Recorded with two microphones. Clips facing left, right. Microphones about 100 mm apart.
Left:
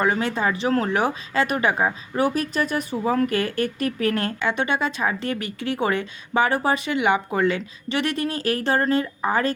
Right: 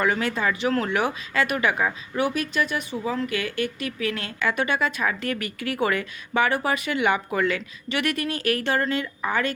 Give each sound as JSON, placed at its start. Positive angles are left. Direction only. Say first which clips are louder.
{"t": 0.0, "sound": "speech", "louder": "left 2 dB", "side_deg": 25}
{"t": 4.4, "sound": "speech", "louder": "left 1 dB", "side_deg": 25}